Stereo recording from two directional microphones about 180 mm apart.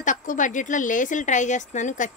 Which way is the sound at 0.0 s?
45° left (ahead or behind).